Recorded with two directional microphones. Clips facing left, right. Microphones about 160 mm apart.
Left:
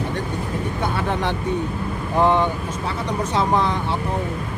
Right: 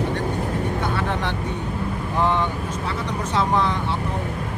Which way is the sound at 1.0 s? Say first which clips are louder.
Left 2 dB; 15° left (ahead or behind).